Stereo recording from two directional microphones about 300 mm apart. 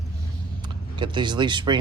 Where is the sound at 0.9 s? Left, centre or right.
Centre.